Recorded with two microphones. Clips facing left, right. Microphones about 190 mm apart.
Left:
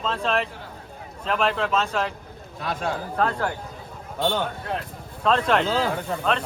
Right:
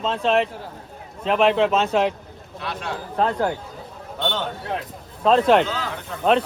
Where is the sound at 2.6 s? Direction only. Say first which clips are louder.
Left 3 dB; 45° left (ahead or behind).